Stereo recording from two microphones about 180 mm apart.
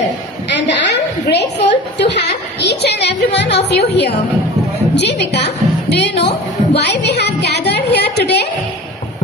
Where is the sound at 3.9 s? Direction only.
70° left (ahead or behind).